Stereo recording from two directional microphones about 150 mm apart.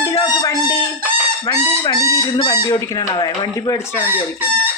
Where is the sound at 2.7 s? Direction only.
20° left (ahead or behind).